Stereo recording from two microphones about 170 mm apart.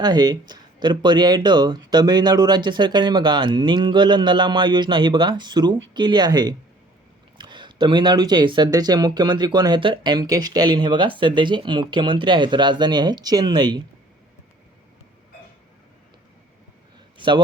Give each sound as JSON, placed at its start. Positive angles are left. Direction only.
{"t": 0.0, "sound": "speech", "side_deg": -25}
{"t": 17.2, "sound": "a man's voice", "side_deg": -30}